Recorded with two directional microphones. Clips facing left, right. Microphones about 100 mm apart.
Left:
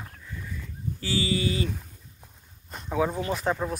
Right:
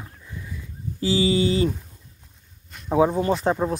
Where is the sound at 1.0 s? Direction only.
20° right (ahead or behind).